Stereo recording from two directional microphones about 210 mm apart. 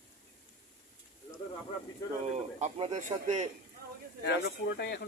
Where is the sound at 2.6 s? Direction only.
35° right (ahead or behind).